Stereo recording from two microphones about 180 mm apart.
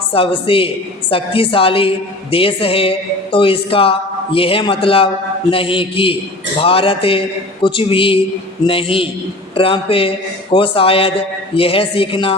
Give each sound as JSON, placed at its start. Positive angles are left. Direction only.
{"t": 0.1, "sound": "a woman's voice", "side_deg": 30}
{"t": 5.5, "sound": "mantra", "side_deg": 30}
{"t": 6.6, "sound": "a woman's voice", "side_deg": 30}
{"t": 8.6, "sound": "mantra", "side_deg": 30}
{"t": 9.6, "sound": "a woman's voice", "side_deg": 30}